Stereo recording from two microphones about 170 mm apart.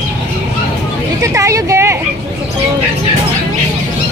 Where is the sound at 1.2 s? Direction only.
20° right (ahead or behind).